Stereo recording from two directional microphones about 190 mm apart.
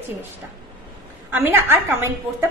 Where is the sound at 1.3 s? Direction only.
10° right (ahead or behind).